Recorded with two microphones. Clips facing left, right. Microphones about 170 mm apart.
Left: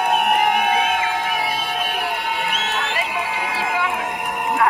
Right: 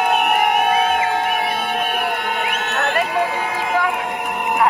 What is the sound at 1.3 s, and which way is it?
Crowd, 55° right (ahead or behind).